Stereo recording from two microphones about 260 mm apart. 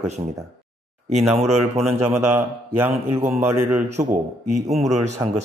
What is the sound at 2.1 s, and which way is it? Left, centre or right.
A man's voice, centre.